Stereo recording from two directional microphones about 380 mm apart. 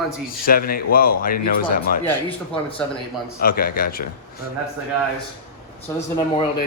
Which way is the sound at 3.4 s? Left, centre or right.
Left.